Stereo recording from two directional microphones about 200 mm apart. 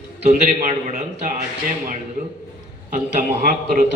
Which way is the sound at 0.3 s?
35° right (ahead or behind).